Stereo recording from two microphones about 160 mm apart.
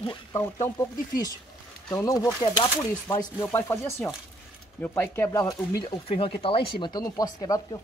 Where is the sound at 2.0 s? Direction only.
20° left (ahead or behind).